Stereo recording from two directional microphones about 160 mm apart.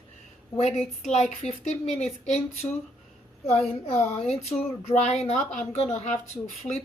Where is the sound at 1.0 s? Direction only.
45° left (ahead or behind).